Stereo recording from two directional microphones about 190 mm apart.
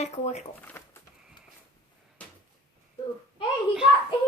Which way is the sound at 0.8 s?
15° left (ahead or behind).